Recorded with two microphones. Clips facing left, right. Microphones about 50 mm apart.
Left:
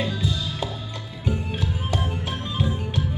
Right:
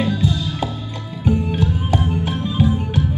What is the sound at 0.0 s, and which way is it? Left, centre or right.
Music, centre.